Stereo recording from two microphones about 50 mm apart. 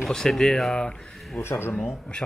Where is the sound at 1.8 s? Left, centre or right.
Centre.